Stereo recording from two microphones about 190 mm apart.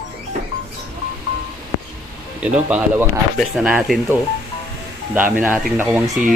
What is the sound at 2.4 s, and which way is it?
Speech, 5° right (ahead or behind).